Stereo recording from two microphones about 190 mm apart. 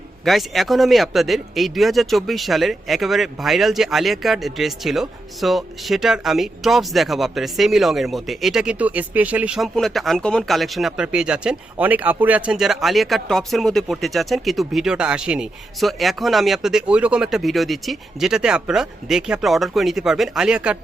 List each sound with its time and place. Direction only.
0.3 s speech: centre (ahead or behind)